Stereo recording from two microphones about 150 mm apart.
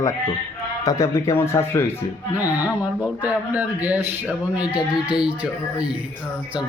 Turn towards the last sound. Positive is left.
turn(degrees=-10)  # may be behind; listen again after turning